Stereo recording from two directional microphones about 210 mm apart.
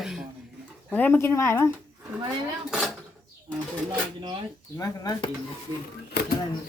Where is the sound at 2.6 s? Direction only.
5° right (ahead or behind).